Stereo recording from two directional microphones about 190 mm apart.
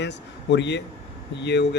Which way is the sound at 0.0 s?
65° left (ahead or behind).